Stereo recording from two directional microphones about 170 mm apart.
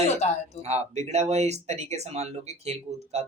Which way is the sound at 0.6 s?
40° right (ahead or behind).